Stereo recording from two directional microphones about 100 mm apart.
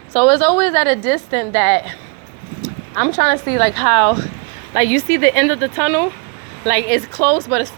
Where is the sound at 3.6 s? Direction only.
45° left (ahead or behind).